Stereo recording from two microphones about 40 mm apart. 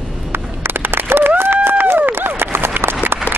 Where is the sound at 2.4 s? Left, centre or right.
Right.